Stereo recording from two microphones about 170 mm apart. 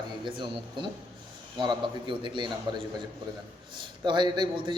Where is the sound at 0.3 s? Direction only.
25° right (ahead or behind).